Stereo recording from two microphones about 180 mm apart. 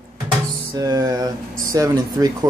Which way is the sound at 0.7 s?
20° right (ahead or behind).